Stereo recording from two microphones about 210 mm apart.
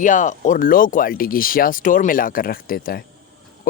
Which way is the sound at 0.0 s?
35° left (ahead or behind).